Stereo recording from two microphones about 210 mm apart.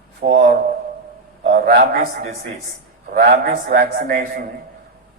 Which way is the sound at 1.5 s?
45° right (ahead or behind).